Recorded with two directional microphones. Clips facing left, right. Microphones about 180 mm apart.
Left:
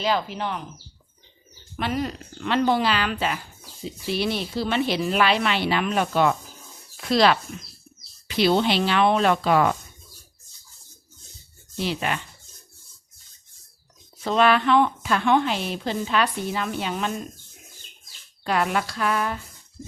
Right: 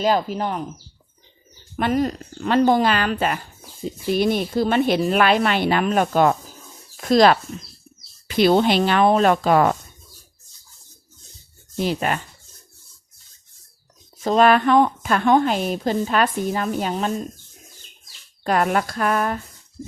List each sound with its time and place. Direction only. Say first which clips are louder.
0.0 s a woman's voice: right 5 dB; 45° right (ahead or behind)
1.7 s a woman's voice: right 6 dB; 45° right (ahead or behind)
11.8 s a woman's voice: right 4 dB; 45° right (ahead or behind)
14.3 s a woman's voice: right 4 dB; 45° right (ahead or behind)
18.4 s a woman's voice: right 4 dB; 45° right (ahead or behind)